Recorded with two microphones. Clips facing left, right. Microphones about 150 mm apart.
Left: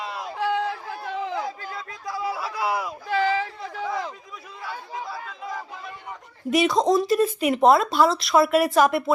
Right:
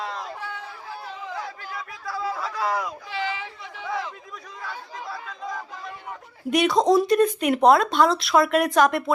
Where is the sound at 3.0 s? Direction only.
45° left (ahead or behind).